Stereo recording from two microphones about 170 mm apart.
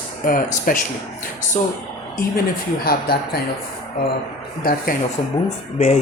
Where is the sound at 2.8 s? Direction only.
65° left (ahead or behind).